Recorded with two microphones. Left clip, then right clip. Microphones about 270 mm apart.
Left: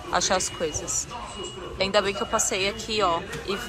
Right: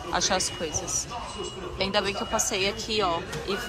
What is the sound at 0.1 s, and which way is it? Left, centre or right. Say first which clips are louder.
Speech: left 2 dB; centre.